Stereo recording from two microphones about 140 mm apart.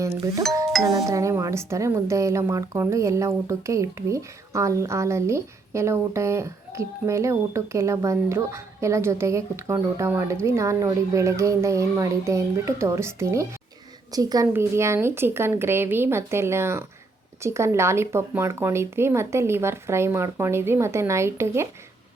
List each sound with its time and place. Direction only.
0.0 s a woman's voice: 25° right (ahead or behind)